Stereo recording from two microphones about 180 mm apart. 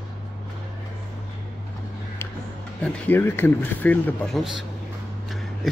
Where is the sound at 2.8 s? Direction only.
10° left (ahead or behind).